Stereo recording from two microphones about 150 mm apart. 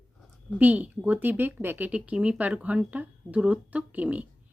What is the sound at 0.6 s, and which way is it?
A woman's voice, 10° right (ahead or behind).